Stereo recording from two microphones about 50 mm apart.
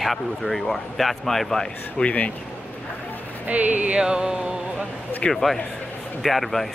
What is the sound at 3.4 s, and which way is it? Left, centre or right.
Speech, right.